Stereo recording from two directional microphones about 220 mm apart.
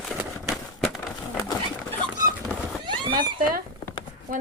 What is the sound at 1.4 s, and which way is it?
Bird, 10° left (ahead or behind).